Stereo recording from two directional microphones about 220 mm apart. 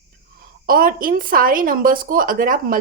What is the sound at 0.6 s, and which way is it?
Speech, 40° right (ahead or behind).